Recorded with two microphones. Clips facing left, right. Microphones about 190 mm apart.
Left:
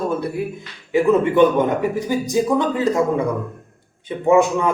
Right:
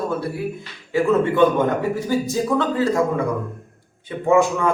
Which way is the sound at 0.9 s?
20° left (ahead or behind).